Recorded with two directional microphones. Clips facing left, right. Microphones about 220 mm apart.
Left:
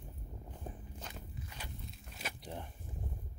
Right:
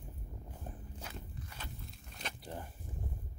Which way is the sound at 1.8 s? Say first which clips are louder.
Even; 5° left (ahead or behind).